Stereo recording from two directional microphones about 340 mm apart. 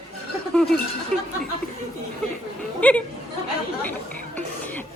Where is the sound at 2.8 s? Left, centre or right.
Centre.